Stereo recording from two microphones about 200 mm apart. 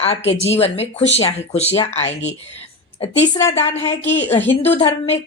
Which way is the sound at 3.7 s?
30° left (ahead or behind).